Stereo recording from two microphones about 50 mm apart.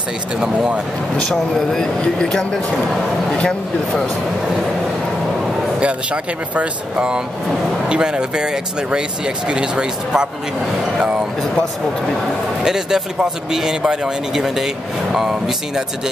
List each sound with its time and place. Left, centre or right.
1.3 s speech: centre
3.3 s speech: left
6.5 s speech: right
12.6 s speech: centre